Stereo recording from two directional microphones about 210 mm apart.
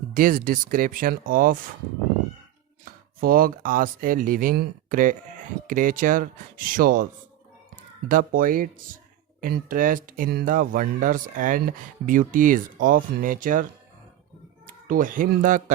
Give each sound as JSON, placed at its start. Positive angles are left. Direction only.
{"t": 0.1, "sound": "speech", "side_deg": -40}
{"t": 3.2, "sound": "speech", "side_deg": -45}
{"t": 14.8, "sound": "speech", "side_deg": -40}